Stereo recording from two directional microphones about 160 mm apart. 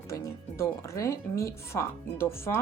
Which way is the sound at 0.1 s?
15° left (ahead or behind).